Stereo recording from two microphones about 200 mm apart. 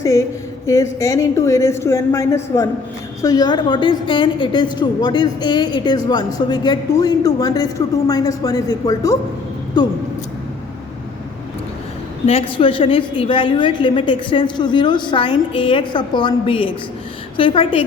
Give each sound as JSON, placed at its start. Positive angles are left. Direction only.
{"t": 0.0, "sound": "a woman's voice", "side_deg": 15}
{"t": 12.2, "sound": "a woman's voice", "side_deg": 30}